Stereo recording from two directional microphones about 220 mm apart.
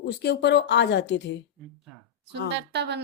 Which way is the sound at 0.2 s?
50° left (ahead or behind).